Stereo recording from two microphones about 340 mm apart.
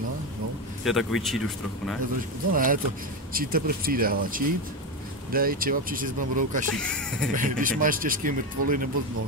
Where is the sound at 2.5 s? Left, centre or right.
Right.